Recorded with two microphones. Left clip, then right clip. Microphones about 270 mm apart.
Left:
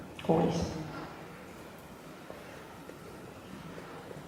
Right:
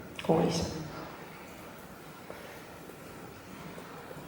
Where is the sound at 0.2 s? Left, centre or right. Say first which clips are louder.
Right 1 dB; centre.